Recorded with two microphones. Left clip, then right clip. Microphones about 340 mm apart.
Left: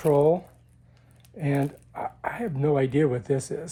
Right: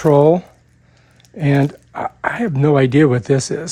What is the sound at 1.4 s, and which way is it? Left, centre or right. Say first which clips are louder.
Speech: right 10 dB; right.